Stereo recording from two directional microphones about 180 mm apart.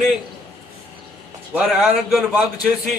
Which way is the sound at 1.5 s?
5° right (ahead or behind).